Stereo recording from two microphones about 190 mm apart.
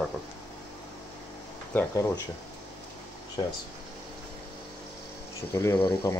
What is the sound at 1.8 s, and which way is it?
Speech, 15° left (ahead or behind).